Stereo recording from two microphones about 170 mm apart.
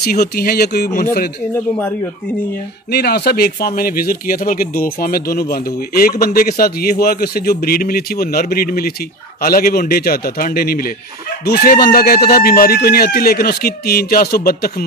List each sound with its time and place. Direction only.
0.0 s speech: 70° left (ahead or behind)
2.9 s speech: 70° left (ahead or behind)